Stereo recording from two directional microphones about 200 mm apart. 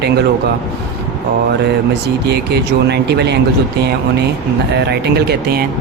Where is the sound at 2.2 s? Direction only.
55° right (ahead or behind).